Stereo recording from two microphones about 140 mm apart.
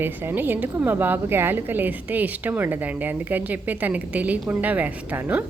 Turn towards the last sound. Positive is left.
turn(degrees=-10)  # may be behind; listen again after turning